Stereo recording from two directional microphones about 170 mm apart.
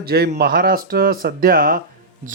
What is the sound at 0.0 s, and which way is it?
A man's voice, 65° right (ahead or behind).